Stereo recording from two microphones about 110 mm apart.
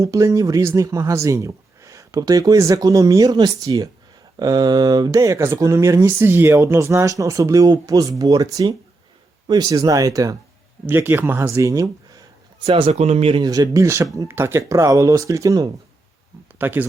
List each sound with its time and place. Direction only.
0.0 s speech: 30° right (ahead or behind)
10.8 s speech: 20° right (ahead or behind)
12.6 s speech: 55° right (ahead or behind)
12.9 s speech: 75° right (ahead or behind)
13.3 s speech: 40° right (ahead or behind)
16.6 s speech: 15° right (ahead or behind)